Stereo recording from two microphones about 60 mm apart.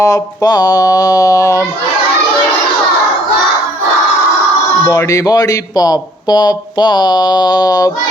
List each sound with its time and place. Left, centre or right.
0.0 s speech: left
4.9 s speech: left
7.7 s speech: left